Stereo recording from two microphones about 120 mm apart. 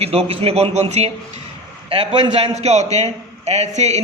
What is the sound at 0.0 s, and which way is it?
A man's voice, 55° right (ahead or behind).